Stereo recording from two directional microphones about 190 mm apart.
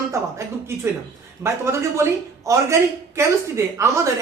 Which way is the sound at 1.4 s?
15° right (ahead or behind).